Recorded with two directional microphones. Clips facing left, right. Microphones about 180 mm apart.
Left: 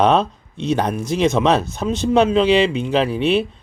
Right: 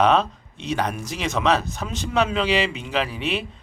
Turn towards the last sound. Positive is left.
turn(degrees=30)  # may be behind; listen again after turning